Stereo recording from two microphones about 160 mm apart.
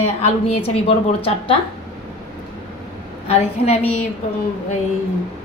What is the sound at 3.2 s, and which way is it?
Speech, 40° left (ahead or behind).